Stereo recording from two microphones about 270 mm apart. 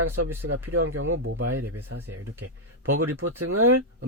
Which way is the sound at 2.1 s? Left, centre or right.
Right.